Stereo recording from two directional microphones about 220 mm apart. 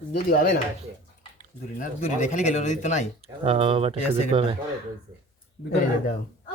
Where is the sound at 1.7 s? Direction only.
35° left (ahead or behind).